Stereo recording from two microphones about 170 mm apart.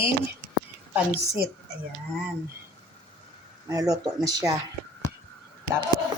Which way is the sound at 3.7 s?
20° right (ahead or behind).